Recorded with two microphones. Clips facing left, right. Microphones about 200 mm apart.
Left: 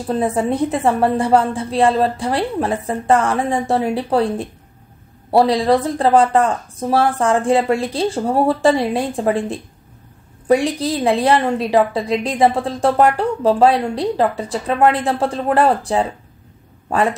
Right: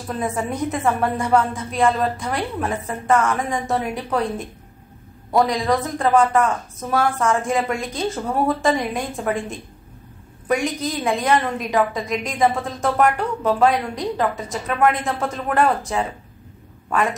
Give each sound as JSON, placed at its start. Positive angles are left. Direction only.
{"t": 0.0, "sound": "a woman's voice", "side_deg": 30}